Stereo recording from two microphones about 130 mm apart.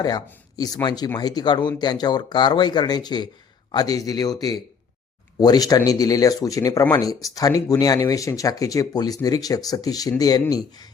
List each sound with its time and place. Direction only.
0.5 s speech: 30° left (ahead or behind)